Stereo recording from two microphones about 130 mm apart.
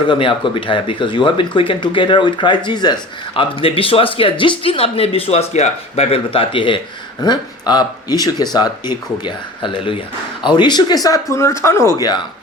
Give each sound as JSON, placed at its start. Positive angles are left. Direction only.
{"t": 0.1, "sound": "speech", "side_deg": 40}